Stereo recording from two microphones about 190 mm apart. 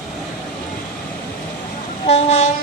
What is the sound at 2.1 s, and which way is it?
Train, 35° left (ahead or behind).